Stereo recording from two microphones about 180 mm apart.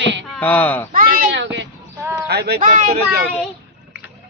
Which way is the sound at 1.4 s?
75° right (ahead or behind).